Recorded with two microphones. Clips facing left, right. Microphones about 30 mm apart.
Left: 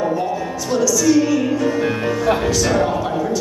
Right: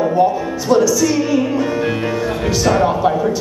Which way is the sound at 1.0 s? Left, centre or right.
Centre.